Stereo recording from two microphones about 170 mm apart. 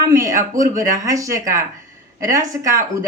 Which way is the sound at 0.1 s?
20° right (ahead or behind).